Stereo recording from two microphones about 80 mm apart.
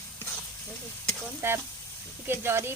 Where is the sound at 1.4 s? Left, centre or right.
Right.